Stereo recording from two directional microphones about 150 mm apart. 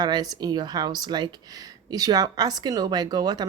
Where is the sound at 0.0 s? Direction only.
25° right (ahead or behind).